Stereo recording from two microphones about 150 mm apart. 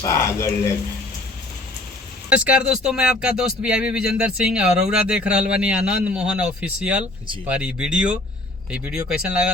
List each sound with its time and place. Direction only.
0.0 s speech: 20° left (ahead or behind)
2.3 s speech: 10° right (ahead or behind)